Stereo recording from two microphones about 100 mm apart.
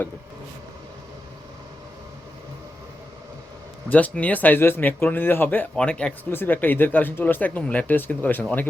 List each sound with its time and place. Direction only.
3.8 s speech: 15° left (ahead or behind)